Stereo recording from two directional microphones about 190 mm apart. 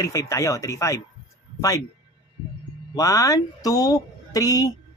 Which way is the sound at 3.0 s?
15° left (ahead or behind).